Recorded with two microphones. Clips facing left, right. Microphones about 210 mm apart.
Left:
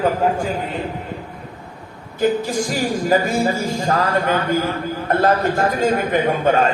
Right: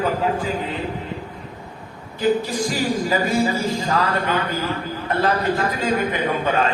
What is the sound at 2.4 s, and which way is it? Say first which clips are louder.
Speech: left 2 dB; 45° left (ahead or behind).